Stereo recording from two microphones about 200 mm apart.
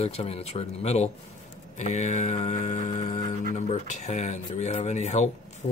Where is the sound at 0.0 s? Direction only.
30° left (ahead or behind).